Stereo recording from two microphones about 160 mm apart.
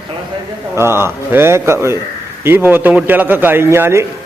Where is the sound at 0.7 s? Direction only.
15° right (ahead or behind).